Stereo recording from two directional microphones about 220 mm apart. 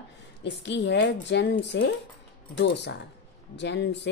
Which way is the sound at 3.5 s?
50° left (ahead or behind).